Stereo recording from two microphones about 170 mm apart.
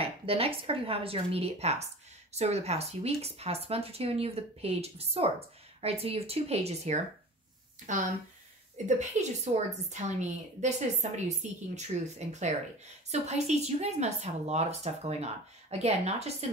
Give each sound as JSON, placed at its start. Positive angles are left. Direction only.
{"t": 0.0, "sound": "a woman's voice", "side_deg": -35}